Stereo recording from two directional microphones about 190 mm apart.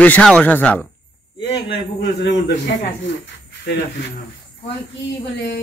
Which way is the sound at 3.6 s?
65° left (ahead or behind).